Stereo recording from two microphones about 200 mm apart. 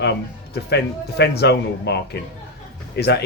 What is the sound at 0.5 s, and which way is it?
Speech, 55° left (ahead or behind).